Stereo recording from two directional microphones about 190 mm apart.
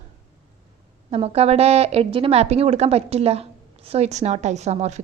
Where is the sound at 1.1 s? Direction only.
35° right (ahead or behind).